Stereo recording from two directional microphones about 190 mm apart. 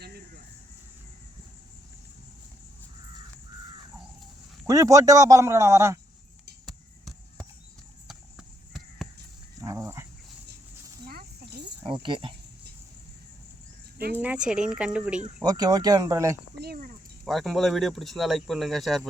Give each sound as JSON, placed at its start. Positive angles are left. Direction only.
{"t": 4.6, "sound": "a man's voice", "side_deg": -15}
{"t": 6.7, "sound": "a sound", "side_deg": 0}
{"t": 9.6, "sound": "dog", "side_deg": -15}
{"t": 11.1, "sound": "snake", "side_deg": -50}
{"t": 11.9, "sound": "speech", "side_deg": -25}
{"t": 14.2, "sound": "speech", "side_deg": -5}
{"t": 15.4, "sound": "speech", "side_deg": -20}
{"t": 16.6, "sound": "a sound", "side_deg": -55}
{"t": 17.2, "sound": "speech", "side_deg": 0}